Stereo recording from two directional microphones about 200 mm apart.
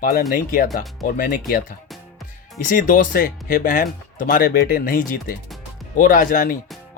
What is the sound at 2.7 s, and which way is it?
Speech, 45° left (ahead or behind).